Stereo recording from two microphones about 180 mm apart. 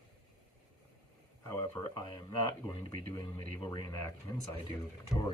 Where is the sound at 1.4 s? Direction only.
15° left (ahead or behind).